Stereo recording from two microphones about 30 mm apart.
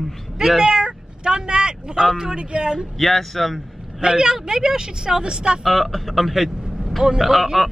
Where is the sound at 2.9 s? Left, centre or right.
Centre.